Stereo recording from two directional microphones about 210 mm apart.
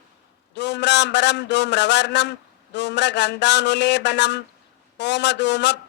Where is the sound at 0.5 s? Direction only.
55° left (ahead or behind).